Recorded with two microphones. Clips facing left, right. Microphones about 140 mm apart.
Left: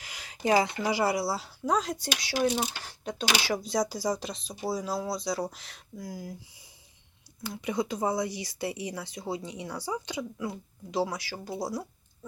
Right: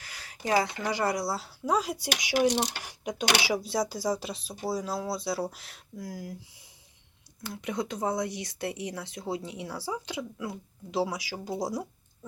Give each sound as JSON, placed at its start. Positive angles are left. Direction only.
{"t": 0.0, "sound": "speech", "side_deg": 15}
{"t": 2.5, "sound": "speech", "side_deg": -75}
{"t": 2.8, "sound": "speech", "side_deg": -10}